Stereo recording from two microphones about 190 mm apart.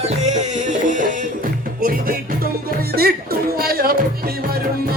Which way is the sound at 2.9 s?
55° right (ahead or behind).